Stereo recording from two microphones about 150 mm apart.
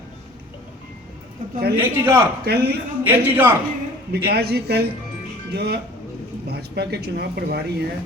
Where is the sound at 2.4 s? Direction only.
90° right.